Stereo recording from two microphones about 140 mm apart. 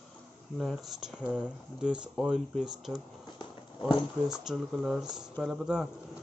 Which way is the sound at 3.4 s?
35° left (ahead or behind).